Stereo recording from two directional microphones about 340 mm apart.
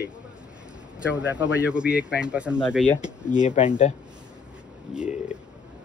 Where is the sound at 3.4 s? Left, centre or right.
Left.